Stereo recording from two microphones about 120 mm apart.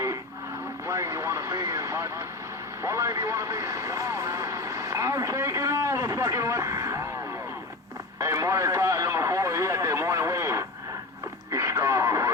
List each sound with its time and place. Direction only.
0.9 s vehicle: 25° right (ahead or behind)
2.8 s speech: 25° right (ahead or behind)
8.2 s radio: 25° right (ahead or behind)